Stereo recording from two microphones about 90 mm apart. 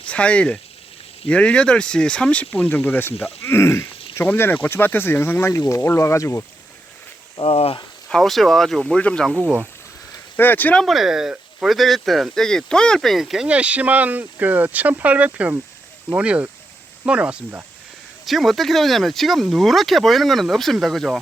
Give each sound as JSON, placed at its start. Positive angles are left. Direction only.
{"t": 0.0, "sound": "speech", "side_deg": 15}
{"t": 7.3, "sound": "speech", "side_deg": 90}
{"t": 8.1, "sound": "speech", "side_deg": 0}
{"t": 9.0, "sound": "speech", "side_deg": 15}
{"t": 10.3, "sound": "speech", "side_deg": 20}
{"t": 10.8, "sound": "speech", "side_deg": 0}
{"t": 18.3, "sound": "speech", "side_deg": 0}